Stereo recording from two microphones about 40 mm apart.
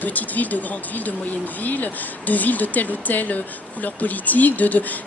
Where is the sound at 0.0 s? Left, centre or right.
Left.